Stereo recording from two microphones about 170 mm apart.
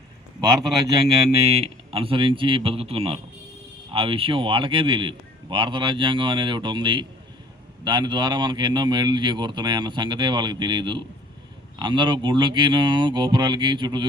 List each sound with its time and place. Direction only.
1.5 s speech: 35° right (ahead or behind)